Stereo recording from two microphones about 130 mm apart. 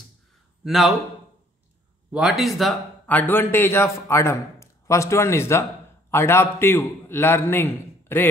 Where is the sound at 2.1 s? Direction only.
5° right (ahead or behind).